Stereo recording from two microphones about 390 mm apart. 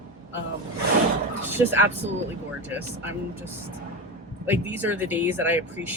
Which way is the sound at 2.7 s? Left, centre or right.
Centre.